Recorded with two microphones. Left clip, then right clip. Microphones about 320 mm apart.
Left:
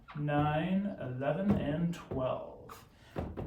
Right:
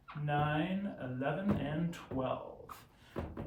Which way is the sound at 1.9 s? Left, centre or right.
Centre.